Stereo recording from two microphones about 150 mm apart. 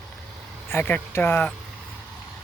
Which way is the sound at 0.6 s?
15° left (ahead or behind).